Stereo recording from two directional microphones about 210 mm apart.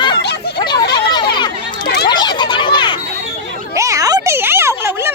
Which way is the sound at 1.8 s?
50° left (ahead or behind).